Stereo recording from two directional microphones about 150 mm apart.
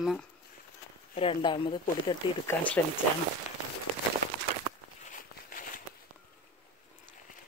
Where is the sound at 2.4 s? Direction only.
15° left (ahead or behind).